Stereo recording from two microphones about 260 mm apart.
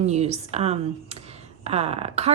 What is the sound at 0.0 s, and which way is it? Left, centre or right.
A woman's voice, right.